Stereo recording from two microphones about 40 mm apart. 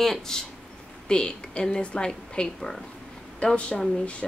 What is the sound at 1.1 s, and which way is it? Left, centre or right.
A woman's voice, left.